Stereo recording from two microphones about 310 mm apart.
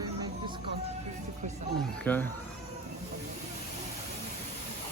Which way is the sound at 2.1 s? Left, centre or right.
Centre.